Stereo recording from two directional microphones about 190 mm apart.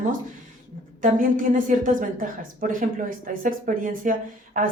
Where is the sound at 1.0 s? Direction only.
45° right (ahead or behind).